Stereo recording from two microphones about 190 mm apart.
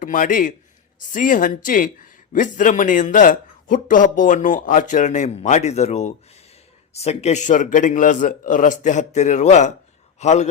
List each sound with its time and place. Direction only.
0.0 s a man's voice: 45° left (ahead or behind)